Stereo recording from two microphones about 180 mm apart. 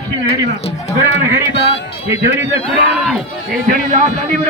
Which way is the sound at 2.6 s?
Centre (ahead or behind).